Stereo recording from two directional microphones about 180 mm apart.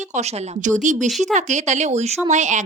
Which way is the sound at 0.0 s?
40° right (ahead or behind).